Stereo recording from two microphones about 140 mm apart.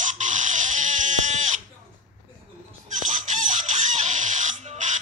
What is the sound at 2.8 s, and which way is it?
Chicken, 60° right (ahead or behind).